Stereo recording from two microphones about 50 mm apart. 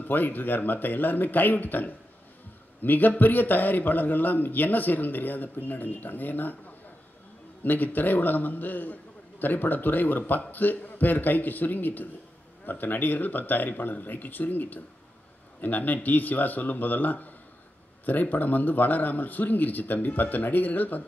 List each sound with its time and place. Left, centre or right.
0.0 s a man's voice: left
7.6 s a man's voice: left